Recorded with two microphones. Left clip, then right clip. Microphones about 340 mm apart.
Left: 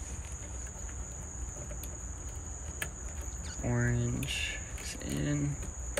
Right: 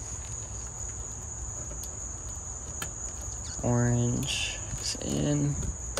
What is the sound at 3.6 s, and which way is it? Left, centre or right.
Cricket, centre.